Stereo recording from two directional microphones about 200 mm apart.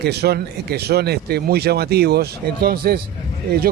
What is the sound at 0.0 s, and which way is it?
Speech, 55° right (ahead or behind).